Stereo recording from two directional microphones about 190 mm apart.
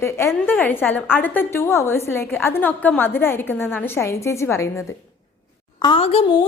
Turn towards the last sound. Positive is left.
turn(degrees=30)  # may be behind; listen again after turning